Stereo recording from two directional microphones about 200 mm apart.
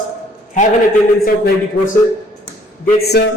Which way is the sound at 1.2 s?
45° left (ahead or behind).